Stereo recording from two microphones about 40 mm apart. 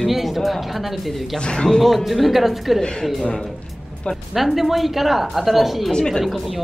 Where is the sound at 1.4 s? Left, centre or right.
Left.